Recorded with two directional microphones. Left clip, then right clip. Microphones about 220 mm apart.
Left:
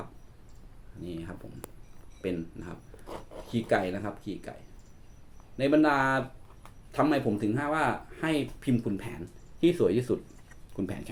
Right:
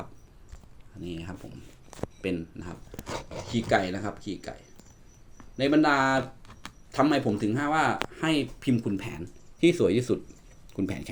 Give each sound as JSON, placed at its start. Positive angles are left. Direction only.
{"t": 1.0, "sound": "speech", "side_deg": -35}
{"t": 5.5, "sound": "speech", "side_deg": -35}